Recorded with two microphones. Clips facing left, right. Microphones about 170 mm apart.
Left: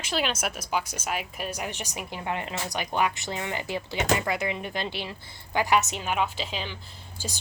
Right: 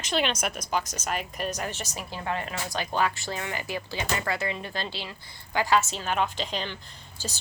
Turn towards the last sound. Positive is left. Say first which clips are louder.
# even
turn(degrees=10)  # may be behind; listen again after turning